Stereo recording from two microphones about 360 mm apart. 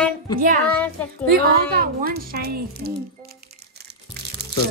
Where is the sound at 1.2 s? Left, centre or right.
Right.